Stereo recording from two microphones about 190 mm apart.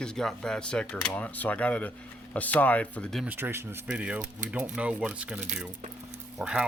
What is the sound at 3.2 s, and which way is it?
Speech, 10° right (ahead or behind).